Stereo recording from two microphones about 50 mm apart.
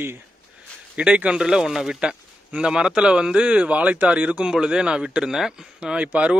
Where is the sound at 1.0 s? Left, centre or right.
Right.